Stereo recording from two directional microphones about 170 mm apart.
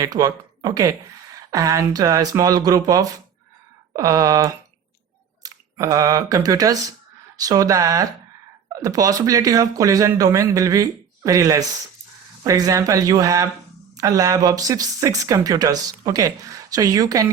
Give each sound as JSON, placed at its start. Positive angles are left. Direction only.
{"t": 0.0, "sound": "speech", "side_deg": -20}